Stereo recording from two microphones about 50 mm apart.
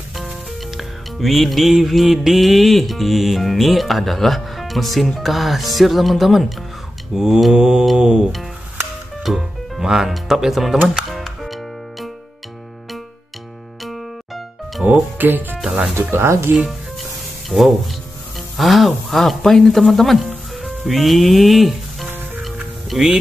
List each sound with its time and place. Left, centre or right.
0.1 s music: centre
7.2 s speech: centre
7.5 s music: centre
9.2 s speech: centre
11.1 s music: centre
13.8 s music: centre
15.1 s speech: right
16.3 s speech: right
17.5 s speech: centre
22.9 s speech: centre